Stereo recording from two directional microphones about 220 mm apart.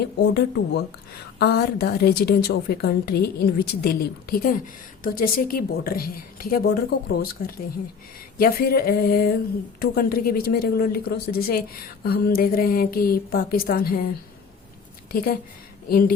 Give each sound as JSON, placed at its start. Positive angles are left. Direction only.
{"t": 0.2, "sound": "a woman's voice", "side_deg": 50}
{"t": 8.4, "sound": "a woman's voice", "side_deg": 40}
{"t": 15.1, "sound": "a woman's voice", "side_deg": 40}